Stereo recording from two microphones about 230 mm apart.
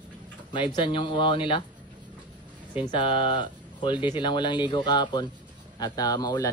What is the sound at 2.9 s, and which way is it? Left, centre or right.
Speech, left.